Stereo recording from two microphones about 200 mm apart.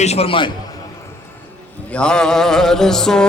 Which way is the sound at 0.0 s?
30° left (ahead or behind).